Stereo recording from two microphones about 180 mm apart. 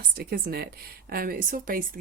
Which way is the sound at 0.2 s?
55° right (ahead or behind).